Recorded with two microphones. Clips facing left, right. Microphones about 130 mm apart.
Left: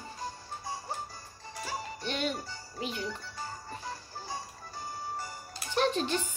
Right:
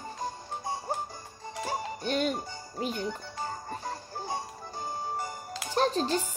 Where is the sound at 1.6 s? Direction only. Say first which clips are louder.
Right 5 dB; 45° right (ahead or behind).